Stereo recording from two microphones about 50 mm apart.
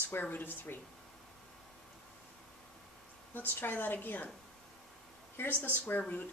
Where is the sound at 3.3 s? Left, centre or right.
Left.